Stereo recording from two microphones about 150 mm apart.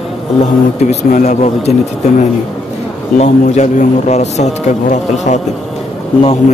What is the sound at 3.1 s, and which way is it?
A man's voice, 50° left (ahead or behind).